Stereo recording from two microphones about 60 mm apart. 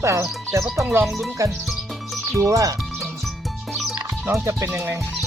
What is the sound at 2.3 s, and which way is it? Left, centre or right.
Music, right.